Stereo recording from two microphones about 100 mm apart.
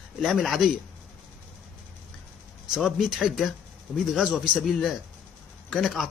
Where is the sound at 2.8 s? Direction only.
Centre (ahead or behind).